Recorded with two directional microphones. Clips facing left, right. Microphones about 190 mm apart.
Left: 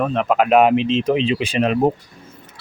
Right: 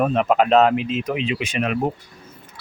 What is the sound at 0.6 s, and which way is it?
Speech, 20° left (ahead or behind).